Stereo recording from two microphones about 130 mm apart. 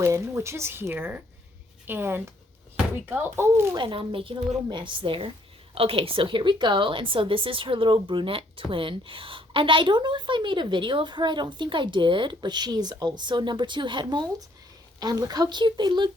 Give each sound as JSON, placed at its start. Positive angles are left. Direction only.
{"t": 0.0, "sound": "a child's voice", "side_deg": -20}
{"t": 3.8, "sound": "a woman's voice", "side_deg": -40}